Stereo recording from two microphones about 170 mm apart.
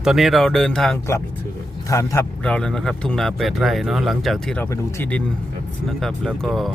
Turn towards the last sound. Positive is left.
turn(degrees=0)  # may be behind; listen again after turning